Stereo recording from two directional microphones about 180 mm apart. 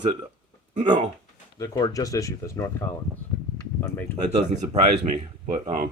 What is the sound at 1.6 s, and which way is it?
Speech, 20° left (ahead or behind).